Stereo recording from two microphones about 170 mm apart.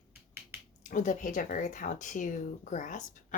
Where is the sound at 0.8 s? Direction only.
50° left (ahead or behind).